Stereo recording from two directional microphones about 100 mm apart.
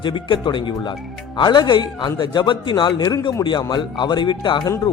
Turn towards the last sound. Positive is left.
turn(degrees=50)  # may be behind; listen again after turning